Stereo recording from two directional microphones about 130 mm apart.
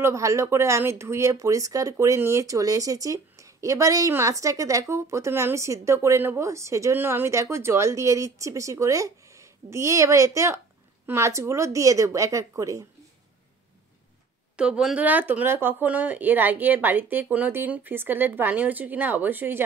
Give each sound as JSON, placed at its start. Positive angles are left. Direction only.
{"t": 0.0, "sound": "speech", "side_deg": -25}
{"t": 14.6, "sound": "speech", "side_deg": -5}